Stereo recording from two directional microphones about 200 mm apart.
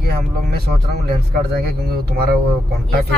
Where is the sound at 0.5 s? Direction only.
55° right (ahead or behind).